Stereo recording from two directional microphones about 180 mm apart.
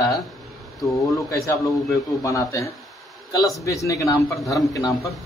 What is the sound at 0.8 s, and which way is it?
Speech, 15° left (ahead or behind).